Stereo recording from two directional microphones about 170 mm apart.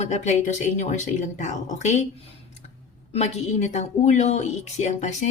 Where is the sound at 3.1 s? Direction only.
40° left (ahead or behind).